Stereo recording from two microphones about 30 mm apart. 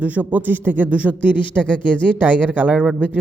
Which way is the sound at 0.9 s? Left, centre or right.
Right.